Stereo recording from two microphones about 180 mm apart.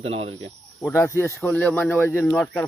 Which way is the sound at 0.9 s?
15° left (ahead or behind).